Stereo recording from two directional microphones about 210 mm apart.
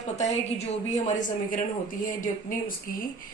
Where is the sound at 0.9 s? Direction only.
35° left (ahead or behind).